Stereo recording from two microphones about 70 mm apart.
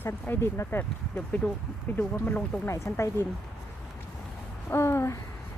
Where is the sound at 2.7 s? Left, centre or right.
Left.